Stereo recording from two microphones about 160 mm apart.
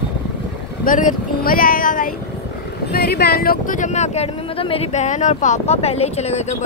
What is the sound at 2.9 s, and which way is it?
Speech, 80° left.